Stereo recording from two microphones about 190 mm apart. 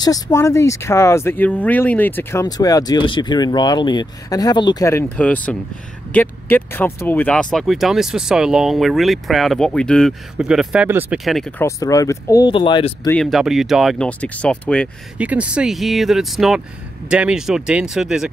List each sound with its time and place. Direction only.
0.0 s speech: 15° left (ahead or behind); by 11.6 s centre (ahead or behind)
11.6 s speech: 15° left (ahead or behind)
13.1 s speech: centre (ahead or behind)
15.1 s speech: 5° right (ahead or behind)